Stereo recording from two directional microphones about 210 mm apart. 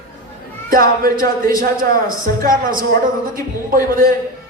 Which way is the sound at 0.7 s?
45° right (ahead or behind).